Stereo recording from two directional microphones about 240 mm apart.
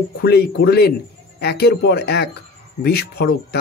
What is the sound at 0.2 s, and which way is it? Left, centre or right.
Speech, left.